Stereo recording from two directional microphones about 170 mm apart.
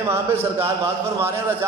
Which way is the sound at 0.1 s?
15° right (ahead or behind).